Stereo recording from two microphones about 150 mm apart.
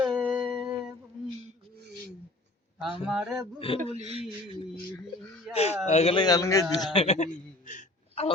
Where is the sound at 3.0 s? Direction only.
5° right (ahead or behind).